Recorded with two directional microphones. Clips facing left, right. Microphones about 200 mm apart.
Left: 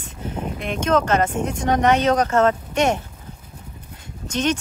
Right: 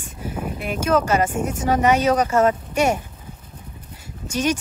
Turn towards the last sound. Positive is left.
turn(degrees=-10)  # may be behind; listen again after turning